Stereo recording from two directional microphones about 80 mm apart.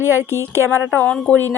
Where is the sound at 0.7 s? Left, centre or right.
Centre.